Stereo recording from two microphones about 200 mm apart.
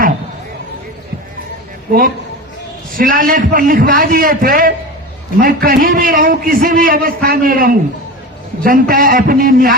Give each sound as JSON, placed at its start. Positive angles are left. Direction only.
{"t": 1.9, "sound": "a man's voice", "side_deg": -45}